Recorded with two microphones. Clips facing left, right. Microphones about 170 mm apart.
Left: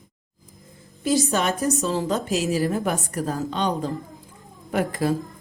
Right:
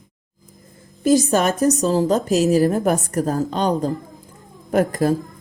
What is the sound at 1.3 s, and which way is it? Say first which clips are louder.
A woman's voice: right 6 dB; 40° right (ahead or behind).